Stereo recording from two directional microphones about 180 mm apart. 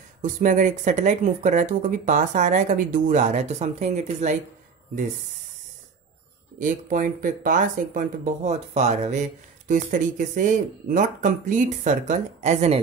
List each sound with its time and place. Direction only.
0.2 s speech: 45° right (ahead or behind)
6.6 s speech: 45° right (ahead or behind)